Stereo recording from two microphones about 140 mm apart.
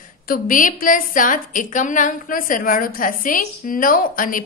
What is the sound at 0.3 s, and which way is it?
A woman's voice, 75° left (ahead or behind).